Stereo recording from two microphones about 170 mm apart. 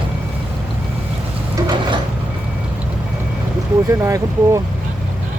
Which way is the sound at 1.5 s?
20° right (ahead or behind).